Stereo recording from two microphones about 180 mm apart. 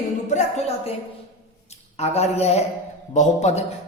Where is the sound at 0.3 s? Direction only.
40° left (ahead or behind).